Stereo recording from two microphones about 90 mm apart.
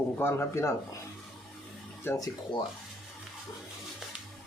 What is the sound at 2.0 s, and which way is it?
Speech, 30° left (ahead or behind).